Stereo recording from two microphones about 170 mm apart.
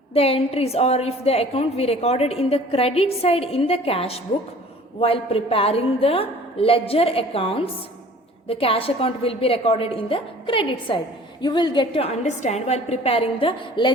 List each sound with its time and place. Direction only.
0.1 s a woman's voice: 35° left (ahead or behind)